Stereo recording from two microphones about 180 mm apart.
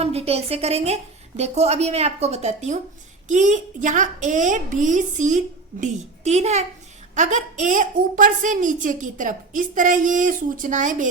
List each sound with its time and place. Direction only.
0.0 s a woman's voice: 35° right (ahead or behind)